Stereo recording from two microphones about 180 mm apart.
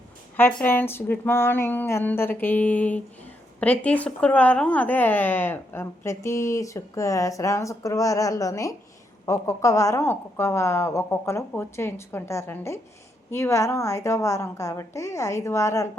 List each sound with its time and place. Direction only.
0.3 s speech: 10° left (ahead or behind)